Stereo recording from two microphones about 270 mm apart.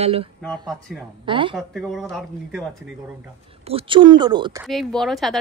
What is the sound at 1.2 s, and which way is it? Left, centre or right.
Speech, centre.